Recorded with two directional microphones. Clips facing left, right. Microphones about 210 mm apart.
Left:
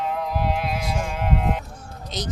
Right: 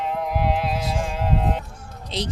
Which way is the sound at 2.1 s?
30° right (ahead or behind).